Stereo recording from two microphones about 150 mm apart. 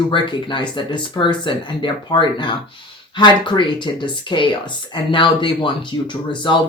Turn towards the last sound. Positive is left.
turn(degrees=30)  # may be behind; listen again after turning